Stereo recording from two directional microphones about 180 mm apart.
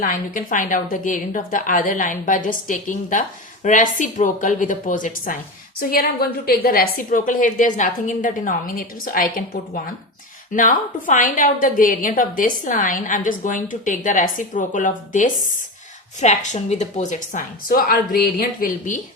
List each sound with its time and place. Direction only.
0.0 s a woman's voice: 50° left (ahead or behind)